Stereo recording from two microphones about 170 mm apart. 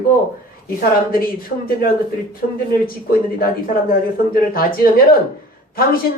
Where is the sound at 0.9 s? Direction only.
60° left (ahead or behind).